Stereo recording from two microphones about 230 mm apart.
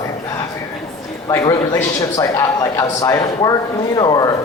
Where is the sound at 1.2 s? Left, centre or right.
Centre.